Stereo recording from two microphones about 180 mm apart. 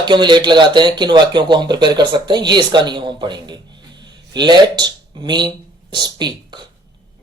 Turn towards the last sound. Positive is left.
turn(degrees=-25)  # may be behind; listen again after turning